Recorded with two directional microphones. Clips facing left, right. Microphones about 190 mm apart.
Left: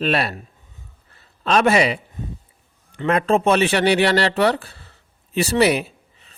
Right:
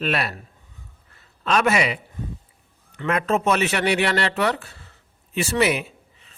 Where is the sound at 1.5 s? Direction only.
30° left (ahead or behind).